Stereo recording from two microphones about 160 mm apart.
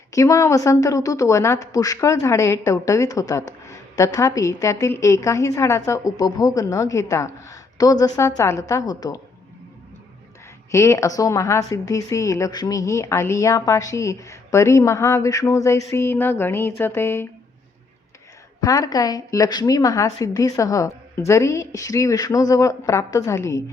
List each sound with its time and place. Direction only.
0.1 s a woman's voice: 20° left (ahead or behind)
10.7 s a woman's voice: 15° left (ahead or behind)
18.6 s a woman's voice: 20° left (ahead or behind)